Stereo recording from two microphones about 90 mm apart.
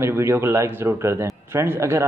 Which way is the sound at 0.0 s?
30° right (ahead or behind).